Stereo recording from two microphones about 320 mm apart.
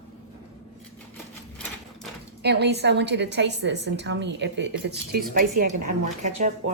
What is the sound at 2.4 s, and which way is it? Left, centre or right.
A woman's voice, right.